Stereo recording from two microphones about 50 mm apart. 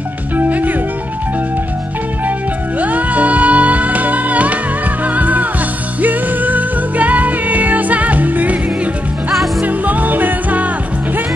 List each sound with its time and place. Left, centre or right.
0.4 s music: right
2.8 s music: right
9.7 s music: right